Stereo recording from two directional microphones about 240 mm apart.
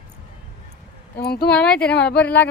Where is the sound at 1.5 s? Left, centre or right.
Centre.